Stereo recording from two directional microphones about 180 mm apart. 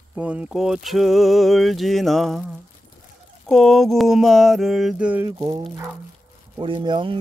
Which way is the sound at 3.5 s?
Centre (ahead or behind).